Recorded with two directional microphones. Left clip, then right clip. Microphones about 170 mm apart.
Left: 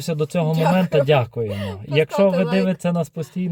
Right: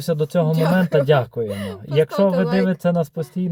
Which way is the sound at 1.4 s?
15° right (ahead or behind).